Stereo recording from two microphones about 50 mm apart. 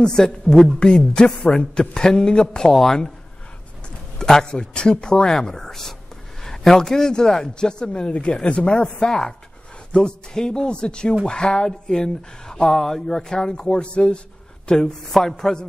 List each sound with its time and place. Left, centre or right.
0.0 s speech: centre
4.2 s speech: centre
14.7 s speech: centre